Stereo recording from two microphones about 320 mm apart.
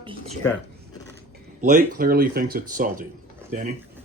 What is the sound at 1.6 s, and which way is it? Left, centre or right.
Speech, right.